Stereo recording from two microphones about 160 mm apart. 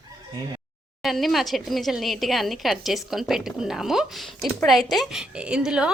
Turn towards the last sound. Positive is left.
turn(degrees=-5)  # may be behind; listen again after turning